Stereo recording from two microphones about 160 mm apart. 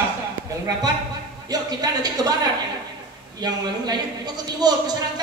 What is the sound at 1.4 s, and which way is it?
Speech, 25° right (ahead or behind).